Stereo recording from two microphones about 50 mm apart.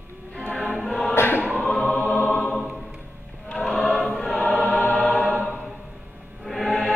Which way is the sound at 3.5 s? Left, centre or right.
Centre.